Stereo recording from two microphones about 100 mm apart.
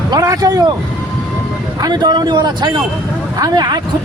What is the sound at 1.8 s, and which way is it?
Speech, 45° right (ahead or behind).